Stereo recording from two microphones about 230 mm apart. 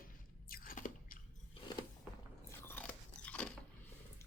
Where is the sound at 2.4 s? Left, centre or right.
Centre.